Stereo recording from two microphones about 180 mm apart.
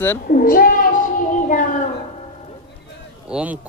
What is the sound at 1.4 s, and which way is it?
Child singing, 45° left (ahead or behind).